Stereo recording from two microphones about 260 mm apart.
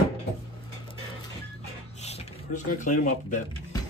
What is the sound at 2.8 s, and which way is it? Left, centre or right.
Speech, left.